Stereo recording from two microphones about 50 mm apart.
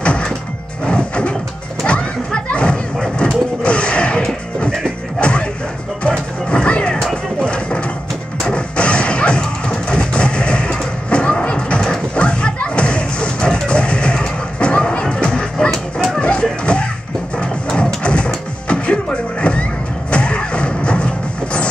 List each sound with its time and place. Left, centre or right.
0.0 s music: left
1.9 s a sound: left
3.6 s music: left
5.2 s music: left
11.8 s thump: centre
15.7 s a sound: centre
16.2 s music: left